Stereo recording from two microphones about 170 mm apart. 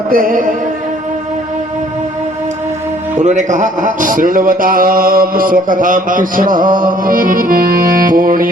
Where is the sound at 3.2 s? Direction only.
45° right (ahead or behind).